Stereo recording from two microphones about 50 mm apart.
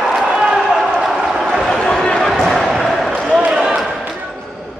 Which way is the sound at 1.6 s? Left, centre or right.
Centre.